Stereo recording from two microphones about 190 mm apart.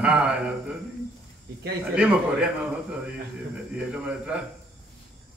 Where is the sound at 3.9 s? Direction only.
5° right (ahead or behind).